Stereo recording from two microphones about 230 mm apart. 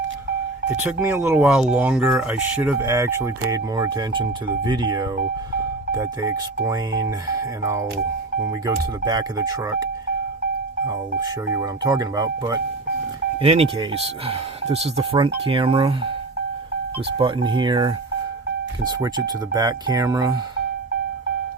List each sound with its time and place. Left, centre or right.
0.9 s speech: centre
11.2 s speech: centre
13.4 s speech: right
17.2 s speech: right